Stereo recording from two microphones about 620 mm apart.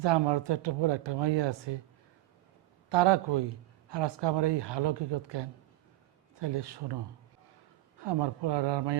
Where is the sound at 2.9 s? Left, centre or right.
Right.